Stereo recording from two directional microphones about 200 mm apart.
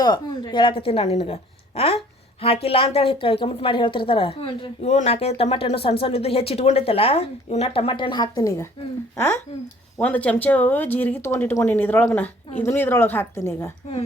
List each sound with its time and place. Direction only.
0.0 s a woman's voice: 20° left (ahead or behind)
10.0 s speech: 5° left (ahead or behind)